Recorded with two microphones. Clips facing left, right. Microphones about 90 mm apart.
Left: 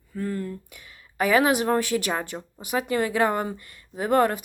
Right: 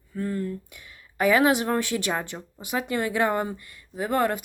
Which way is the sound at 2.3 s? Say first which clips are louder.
Left 2 dB; 10° left (ahead or behind).